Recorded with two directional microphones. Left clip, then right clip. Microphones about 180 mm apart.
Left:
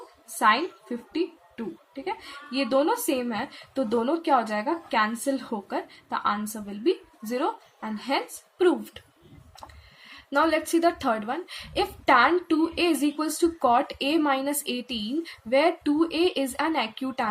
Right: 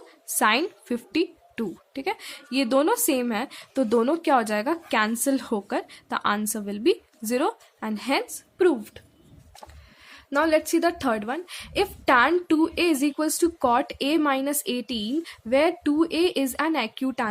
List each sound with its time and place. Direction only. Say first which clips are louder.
0.3 s a woman's voice: even; 45° right (ahead or behind)
8.5 s a woman's voice: right 1 dB; 25° right (ahead or behind)
10.1 s a woman's voice: right 2 dB; 30° right (ahead or behind)